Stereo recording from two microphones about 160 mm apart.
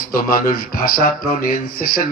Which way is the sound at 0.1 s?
60° left (ahead or behind).